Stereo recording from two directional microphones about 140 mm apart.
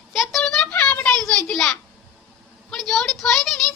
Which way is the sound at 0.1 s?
Centre (ahead or behind).